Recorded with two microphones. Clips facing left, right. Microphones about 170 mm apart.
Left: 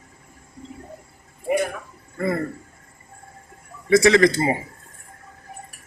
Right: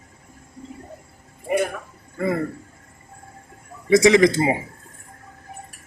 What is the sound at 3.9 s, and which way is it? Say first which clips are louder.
Speech: right 1 dB; 15° right (ahead or behind).